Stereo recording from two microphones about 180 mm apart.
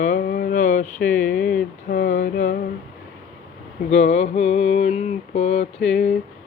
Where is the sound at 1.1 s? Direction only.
5° left (ahead or behind).